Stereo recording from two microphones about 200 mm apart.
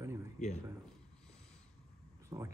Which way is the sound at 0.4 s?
35° left (ahead or behind).